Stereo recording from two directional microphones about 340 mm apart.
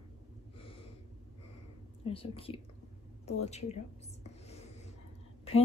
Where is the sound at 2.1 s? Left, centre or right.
Centre.